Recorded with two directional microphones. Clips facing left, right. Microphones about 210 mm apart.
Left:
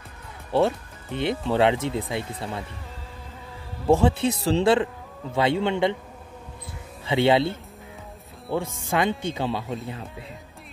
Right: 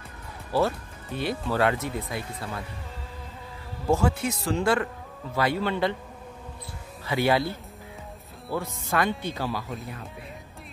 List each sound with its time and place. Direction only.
0.5 s speech: 25° left (ahead or behind)
3.8 s speech: 30° left (ahead or behind)
7.1 s speech: 25° left (ahead or behind)